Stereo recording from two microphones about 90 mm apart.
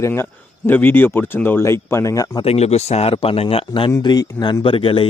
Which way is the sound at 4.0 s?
45° left (ahead or behind).